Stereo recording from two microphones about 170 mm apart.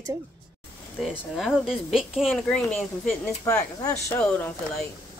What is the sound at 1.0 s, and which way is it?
Speech, centre (ahead or behind).